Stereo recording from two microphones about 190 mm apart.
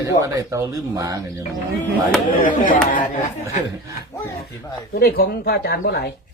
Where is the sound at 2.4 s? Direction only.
45° left (ahead or behind).